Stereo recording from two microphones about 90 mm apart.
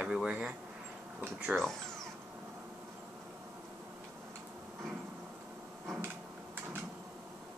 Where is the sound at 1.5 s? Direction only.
5° left (ahead or behind).